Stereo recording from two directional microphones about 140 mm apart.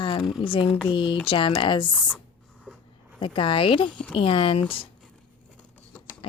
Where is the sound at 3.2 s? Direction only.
35° left (ahead or behind).